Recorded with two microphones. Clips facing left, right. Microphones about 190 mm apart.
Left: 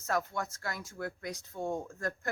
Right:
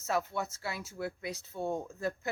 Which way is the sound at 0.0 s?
10° right (ahead or behind).